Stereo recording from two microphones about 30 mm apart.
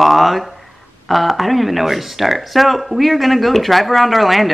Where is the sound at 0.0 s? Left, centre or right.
Centre.